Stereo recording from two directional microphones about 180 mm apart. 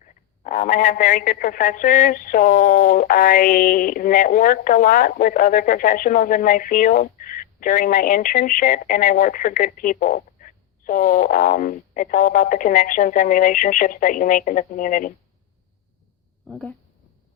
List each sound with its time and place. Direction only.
0.0 s a man's voice: 45° left (ahead or behind)
16.5 s speech: 5° left (ahead or behind)